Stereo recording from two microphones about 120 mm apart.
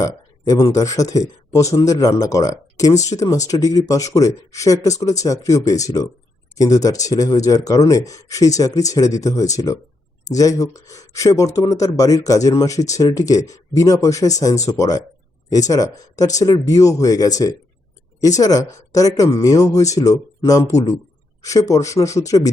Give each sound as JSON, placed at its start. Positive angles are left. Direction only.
{"t": 0.0, "sound": "speech", "side_deg": 30}